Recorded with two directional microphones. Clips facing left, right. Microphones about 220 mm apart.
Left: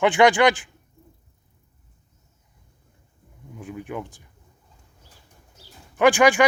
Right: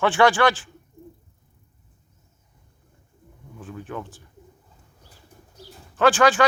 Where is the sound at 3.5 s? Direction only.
15° left (ahead or behind).